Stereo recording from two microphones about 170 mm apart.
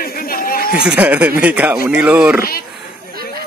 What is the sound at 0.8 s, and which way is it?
Speech, 5° right (ahead or behind).